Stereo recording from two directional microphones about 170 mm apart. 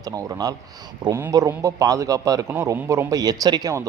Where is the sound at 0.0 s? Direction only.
20° right (ahead or behind).